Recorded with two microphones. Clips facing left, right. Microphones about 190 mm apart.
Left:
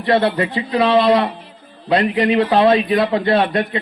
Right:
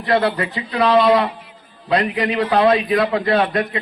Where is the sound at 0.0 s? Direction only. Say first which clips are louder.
Left 2 dB; 25° left (ahead or behind).